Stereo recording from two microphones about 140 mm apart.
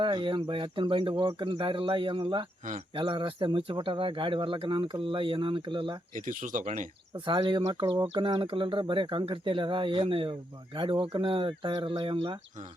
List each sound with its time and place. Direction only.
0.0 s speech: 35° right (ahead or behind)
6.1 s speech: 70° right (ahead or behind)
7.3 s speech: 35° right (ahead or behind)